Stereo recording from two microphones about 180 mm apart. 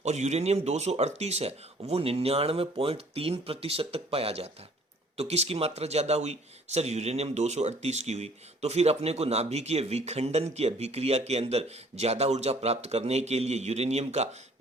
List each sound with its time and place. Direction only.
0.0 s speech: 40° right (ahead or behind)